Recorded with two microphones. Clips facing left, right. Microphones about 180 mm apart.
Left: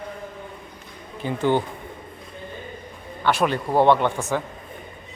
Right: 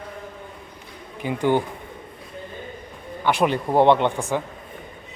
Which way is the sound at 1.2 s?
10° right (ahead or behind).